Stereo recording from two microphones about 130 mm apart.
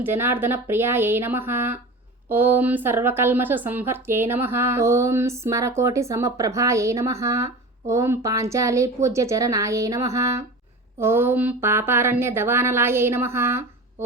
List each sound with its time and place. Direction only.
0.0 s speech: 15° right (ahead or behind)